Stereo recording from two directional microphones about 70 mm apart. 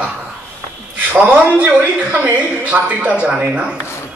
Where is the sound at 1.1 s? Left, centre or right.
Right.